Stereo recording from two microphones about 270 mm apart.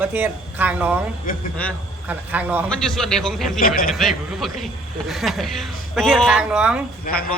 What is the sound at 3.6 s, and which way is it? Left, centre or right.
Speech, left.